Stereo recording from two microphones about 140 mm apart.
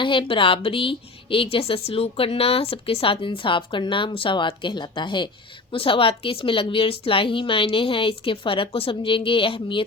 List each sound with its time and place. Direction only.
0.0 s a woman's voice: 35° left (ahead or behind)